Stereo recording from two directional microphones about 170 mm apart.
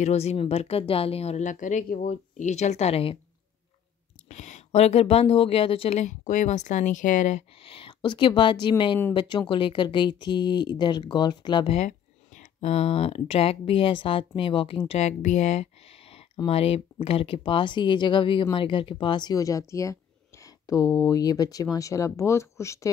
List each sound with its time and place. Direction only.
0.0 s speech: 40° left (ahead or behind)
4.3 s a woman's voice: 45° left (ahead or behind)
7.6 s speech: 30° left (ahead or behind)
12.4 s speech: 40° left (ahead or behind); by 22.8 s 15° left (ahead or behind)